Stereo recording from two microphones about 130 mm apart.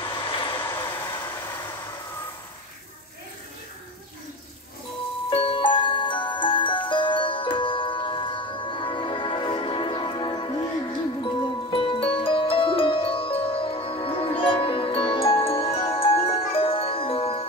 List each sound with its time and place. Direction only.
0.0 s vehicle: 40° left (ahead or behind)
0.7 s vehicle: 20° left (ahead or behind)
5.3 s music: 40° left (ahead or behind)